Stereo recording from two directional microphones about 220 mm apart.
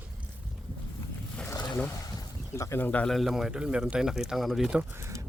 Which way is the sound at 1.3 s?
15° left (ahead or behind).